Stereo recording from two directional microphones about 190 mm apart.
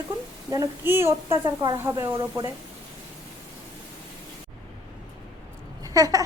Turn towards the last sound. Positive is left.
turn(degrees=-20)  # may be behind; listen again after turning